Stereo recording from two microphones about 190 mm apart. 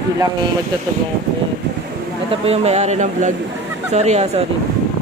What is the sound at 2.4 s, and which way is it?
A man's voice, 35° right (ahead or behind).